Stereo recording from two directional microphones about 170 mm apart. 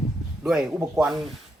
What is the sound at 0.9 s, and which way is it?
Speech, centre (ahead or behind).